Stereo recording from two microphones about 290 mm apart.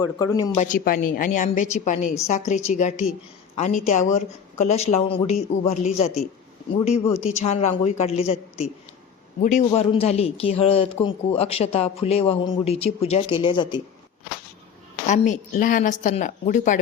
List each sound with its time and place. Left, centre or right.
0.0 s speech: centre
0.6 s speech: left
7.4 s speech: left
15.0 s speech: left